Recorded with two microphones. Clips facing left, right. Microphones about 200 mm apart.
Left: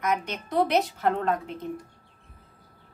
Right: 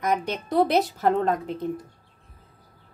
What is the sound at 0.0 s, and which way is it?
A woman's voice, 35° right (ahead or behind).